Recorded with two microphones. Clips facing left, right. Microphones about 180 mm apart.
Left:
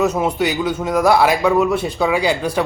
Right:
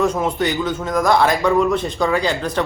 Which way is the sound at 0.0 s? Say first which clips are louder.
Left 1 dB; 10° left (ahead or behind).